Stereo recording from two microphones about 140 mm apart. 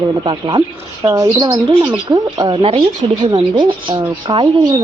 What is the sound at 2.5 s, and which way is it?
Speech, 40° right (ahead or behind).